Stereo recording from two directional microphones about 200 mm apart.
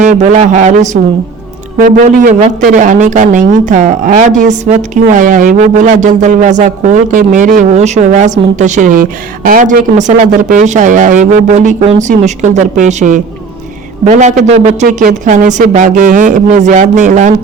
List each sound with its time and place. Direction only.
0.0 s speech: 40° right (ahead or behind)